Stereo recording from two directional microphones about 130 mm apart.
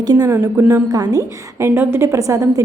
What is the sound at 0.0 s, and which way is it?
A woman's voice, 30° right (ahead or behind).